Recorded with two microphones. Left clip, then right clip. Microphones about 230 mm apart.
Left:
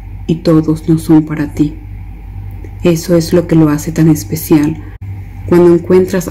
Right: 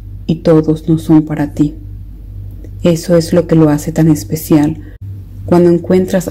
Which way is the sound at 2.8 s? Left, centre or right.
Right.